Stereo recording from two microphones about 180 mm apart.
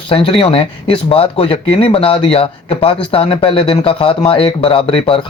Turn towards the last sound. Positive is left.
turn(degrees=30)  # may be behind; listen again after turning